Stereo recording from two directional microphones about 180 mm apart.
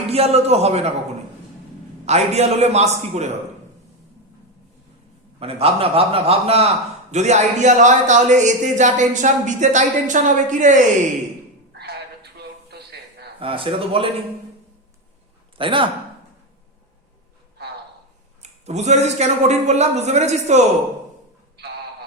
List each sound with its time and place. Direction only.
0.1 s a man's voice: 35° right (ahead or behind)
2.0 s a man's voice: 35° right (ahead or behind)
5.4 s a man's voice: 35° right (ahead or behind)
11.7 s a sound: 65° right (ahead or behind)
13.4 s speech: 30° right (ahead or behind)
15.5 s speech: 30° right (ahead or behind)
18.4 s a man's voice: 40° right (ahead or behind)